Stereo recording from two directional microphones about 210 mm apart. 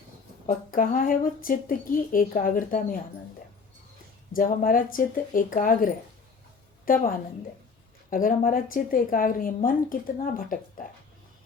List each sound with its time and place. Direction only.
0.4 s a woman's voice: 40° left (ahead or behind)
4.4 s a woman's voice: 40° left (ahead or behind)
8.1 s a woman's voice: 40° left (ahead or behind)